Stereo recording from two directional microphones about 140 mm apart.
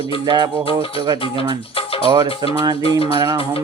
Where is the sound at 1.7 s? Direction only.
40° left (ahead or behind).